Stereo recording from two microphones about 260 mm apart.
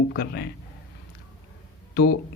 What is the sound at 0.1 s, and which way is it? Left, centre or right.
Speech, left.